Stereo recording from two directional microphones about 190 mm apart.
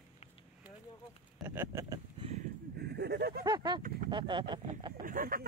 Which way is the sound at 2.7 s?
60° right (ahead or behind).